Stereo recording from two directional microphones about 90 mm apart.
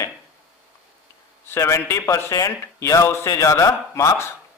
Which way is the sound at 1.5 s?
35° left (ahead or behind).